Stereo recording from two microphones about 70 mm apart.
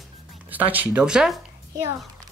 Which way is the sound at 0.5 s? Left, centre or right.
Right.